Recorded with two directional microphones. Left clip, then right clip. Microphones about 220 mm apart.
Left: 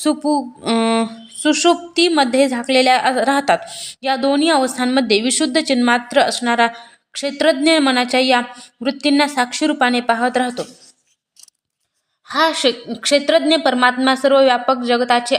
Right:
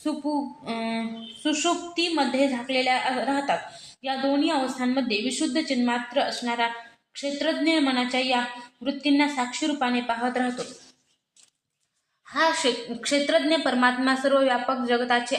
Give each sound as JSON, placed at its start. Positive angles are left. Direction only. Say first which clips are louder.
{"t": 0.0, "sound": "speech", "louder": "left 10 dB", "side_deg": 50}
{"t": 12.3, "sound": "a woman's voice", "louder": "left 7 dB", "side_deg": 45}